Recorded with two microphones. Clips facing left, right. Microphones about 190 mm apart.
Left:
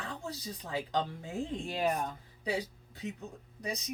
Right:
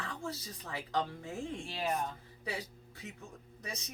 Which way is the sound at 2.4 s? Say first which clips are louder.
Left 6 dB; 15° left (ahead or behind).